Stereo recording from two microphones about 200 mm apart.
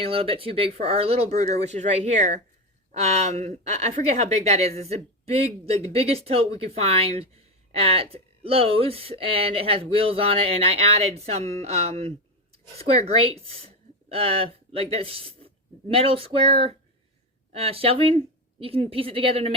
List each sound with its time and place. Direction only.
0.0 s speech: 30° right (ahead or behind)